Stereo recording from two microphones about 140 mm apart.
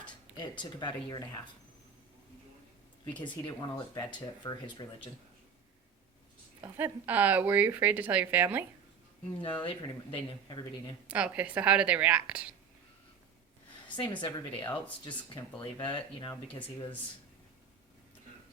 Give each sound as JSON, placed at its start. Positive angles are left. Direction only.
{"t": 0.3, "sound": "speech", "side_deg": 35}
{"t": 3.1, "sound": "speech", "side_deg": 35}
{"t": 6.6, "sound": "speech", "side_deg": -15}
{"t": 9.4, "sound": "speech", "side_deg": 35}
{"t": 11.1, "sound": "speech", "side_deg": -10}
{"t": 13.8, "sound": "a woman's voice", "side_deg": 35}
{"t": 14.5, "sound": "speech", "side_deg": 10}
{"t": 15.5, "sound": "speech", "side_deg": 35}